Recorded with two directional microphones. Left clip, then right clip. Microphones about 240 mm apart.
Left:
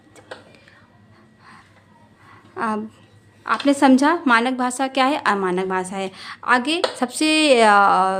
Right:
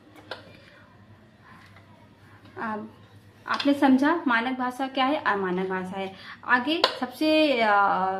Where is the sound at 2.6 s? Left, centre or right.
Left.